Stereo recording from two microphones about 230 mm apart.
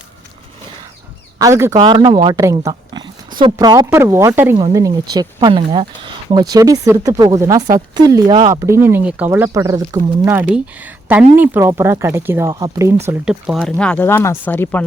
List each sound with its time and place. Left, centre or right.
1.4 s speech: centre